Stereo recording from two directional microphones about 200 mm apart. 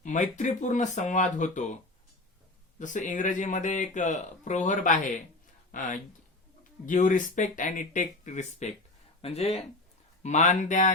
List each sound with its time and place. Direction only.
0.0 s speech: 40° left (ahead or behind)
2.7 s speech: 40° left (ahead or behind)